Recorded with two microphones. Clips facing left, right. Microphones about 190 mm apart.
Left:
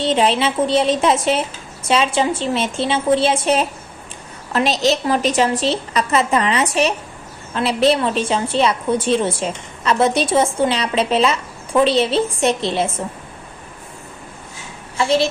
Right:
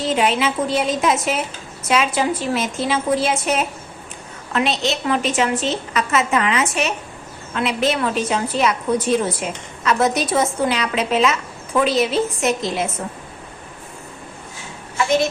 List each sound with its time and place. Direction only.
0.0 s a woman's voice: 30° left (ahead or behind)